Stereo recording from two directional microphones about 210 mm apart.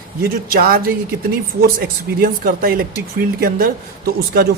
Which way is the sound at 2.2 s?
40° right (ahead or behind).